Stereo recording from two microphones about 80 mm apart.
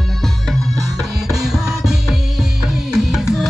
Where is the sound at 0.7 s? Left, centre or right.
Right.